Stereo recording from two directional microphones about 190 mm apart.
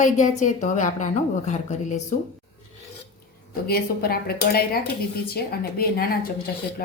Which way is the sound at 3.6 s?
55° left (ahead or behind).